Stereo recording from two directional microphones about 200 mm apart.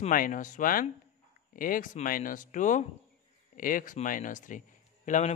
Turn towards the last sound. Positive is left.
turn(degrees=35)  # may be behind; listen again after turning